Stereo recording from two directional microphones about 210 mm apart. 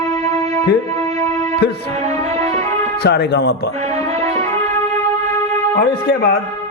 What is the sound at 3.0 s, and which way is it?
Speech, 55° left (ahead or behind).